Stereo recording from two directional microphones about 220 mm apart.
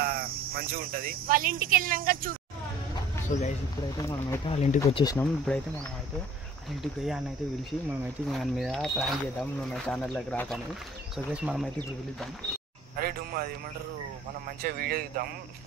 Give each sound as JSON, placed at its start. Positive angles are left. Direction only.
{"t": 0.0, "sound": "speech", "side_deg": -45}
{"t": 3.3, "sound": "speech", "side_deg": 35}
{"t": 4.5, "sound": "speech", "side_deg": 30}
{"t": 4.7, "sound": "speech", "side_deg": 15}
{"t": 5.5, "sound": "speech", "side_deg": 0}
{"t": 6.7, "sound": "speech", "side_deg": 0}
{"t": 8.3, "sound": "speech", "side_deg": 0}
{"t": 11.2, "sound": "speech", "side_deg": -5}
{"t": 12.9, "sound": "speech", "side_deg": -45}
{"t": 14.6, "sound": "speech", "side_deg": -45}